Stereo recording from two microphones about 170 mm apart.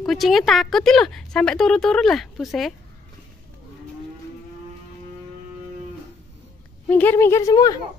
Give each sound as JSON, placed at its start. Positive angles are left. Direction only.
{"t": 0.0, "sound": "speech", "side_deg": 0}
{"t": 6.9, "sound": "speech", "side_deg": 10}